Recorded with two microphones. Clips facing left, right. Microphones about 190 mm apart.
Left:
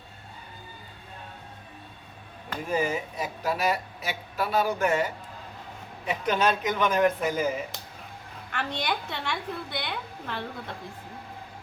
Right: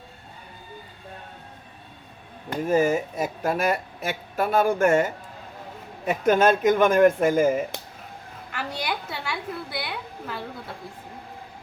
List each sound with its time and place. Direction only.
2.6 s a woman's voice: 45° right (ahead or behind)
8.5 s a woman's voice: 5° right (ahead or behind)